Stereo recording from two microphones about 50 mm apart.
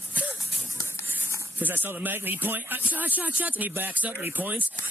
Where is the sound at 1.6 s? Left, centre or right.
Right.